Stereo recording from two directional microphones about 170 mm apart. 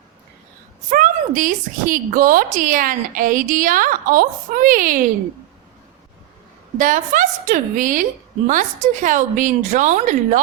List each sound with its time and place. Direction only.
0.9 s a woman's voice: 50° right (ahead or behind)
6.7 s a woman's voice: 50° right (ahead or behind)